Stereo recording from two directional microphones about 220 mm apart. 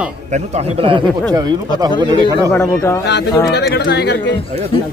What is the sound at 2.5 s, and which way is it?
Speech, 10° left (ahead or behind).